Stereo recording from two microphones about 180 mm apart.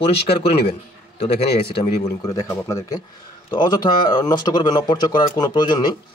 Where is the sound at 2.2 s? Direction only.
20° left (ahead or behind).